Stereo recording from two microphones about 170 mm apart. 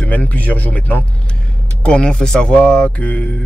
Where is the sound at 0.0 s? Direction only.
10° left (ahead or behind).